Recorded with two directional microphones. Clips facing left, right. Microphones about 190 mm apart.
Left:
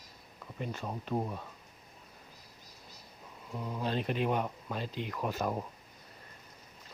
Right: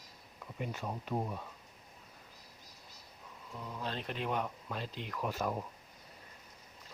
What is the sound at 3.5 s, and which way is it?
Speech, 20° left (ahead or behind).